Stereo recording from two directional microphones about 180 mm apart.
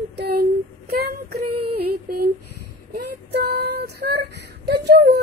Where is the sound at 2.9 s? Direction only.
65° right (ahead or behind).